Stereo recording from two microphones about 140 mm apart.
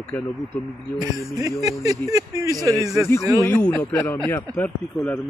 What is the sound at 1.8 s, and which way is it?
Speech, 25° right (ahead or behind).